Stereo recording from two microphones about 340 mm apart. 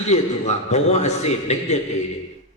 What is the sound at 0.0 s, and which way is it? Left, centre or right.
A man's voice, centre.